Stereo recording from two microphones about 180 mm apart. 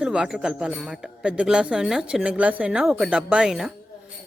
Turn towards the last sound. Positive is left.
turn(degrees=0)  # may be behind; listen again after turning